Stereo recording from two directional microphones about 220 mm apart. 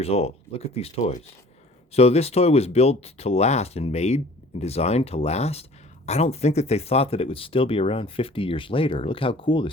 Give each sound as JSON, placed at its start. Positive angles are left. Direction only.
{"t": 0.0, "sound": "speech", "side_deg": 25}